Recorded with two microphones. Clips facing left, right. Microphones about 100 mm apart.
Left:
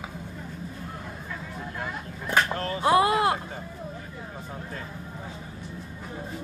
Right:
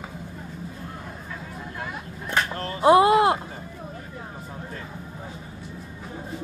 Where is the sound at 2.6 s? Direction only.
30° right (ahead or behind).